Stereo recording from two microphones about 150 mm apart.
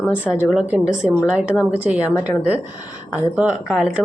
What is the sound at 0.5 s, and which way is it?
Speech, 5° right (ahead or behind).